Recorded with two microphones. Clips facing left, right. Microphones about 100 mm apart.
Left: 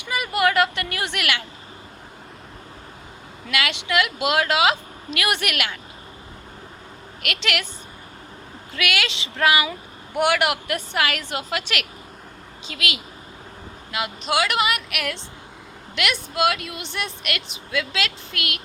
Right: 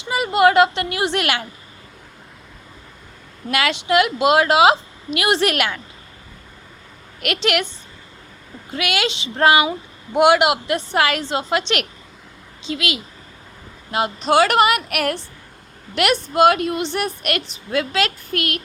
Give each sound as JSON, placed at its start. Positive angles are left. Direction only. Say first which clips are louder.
{"t": 0.0, "sound": "speech", "louder": "right 6 dB", "side_deg": -25}
{"t": 3.8, "sound": "a woman's voice", "louder": "right 8 dB", "side_deg": -30}
{"t": 8.7, "sound": "a woman's voice", "louder": "right 3 dB", "side_deg": -30}